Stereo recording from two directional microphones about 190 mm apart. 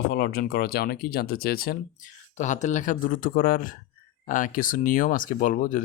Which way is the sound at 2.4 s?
40° left (ahead or behind).